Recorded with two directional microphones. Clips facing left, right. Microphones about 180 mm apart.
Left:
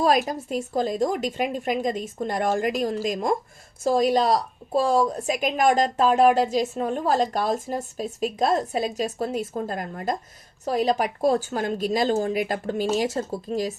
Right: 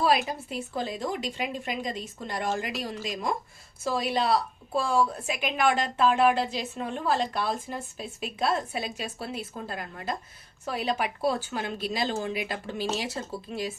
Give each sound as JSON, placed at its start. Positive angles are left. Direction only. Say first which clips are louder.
{"t": 0.0, "sound": "a woman's voice", "louder": "left 4 dB", "side_deg": 45}